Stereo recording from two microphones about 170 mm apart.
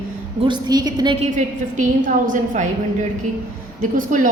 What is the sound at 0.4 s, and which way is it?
Speech, 25° right (ahead or behind).